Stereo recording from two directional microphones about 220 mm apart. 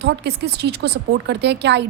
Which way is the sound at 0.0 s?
50° right (ahead or behind).